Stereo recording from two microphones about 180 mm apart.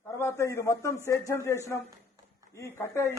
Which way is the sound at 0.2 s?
15° left (ahead or behind).